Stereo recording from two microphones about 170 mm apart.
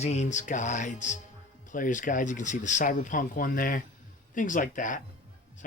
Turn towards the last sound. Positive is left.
turn(degrees=50)  # may be behind; listen again after turning